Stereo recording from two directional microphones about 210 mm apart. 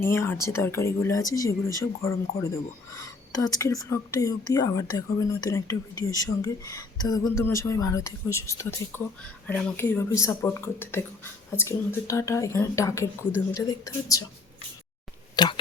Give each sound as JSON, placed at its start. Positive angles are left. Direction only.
{"t": 0.0, "sound": "speech", "side_deg": 10}
{"t": 15.4, "sound": "speech", "side_deg": 20}